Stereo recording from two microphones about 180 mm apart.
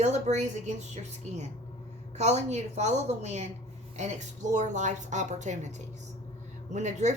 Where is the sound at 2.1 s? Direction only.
40° right (ahead or behind).